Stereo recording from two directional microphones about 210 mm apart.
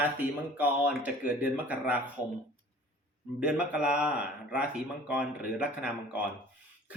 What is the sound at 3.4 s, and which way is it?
Speech, 5° right (ahead or behind).